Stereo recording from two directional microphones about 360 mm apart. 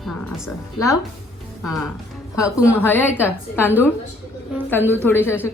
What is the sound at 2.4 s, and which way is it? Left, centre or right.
A woman's voice, centre.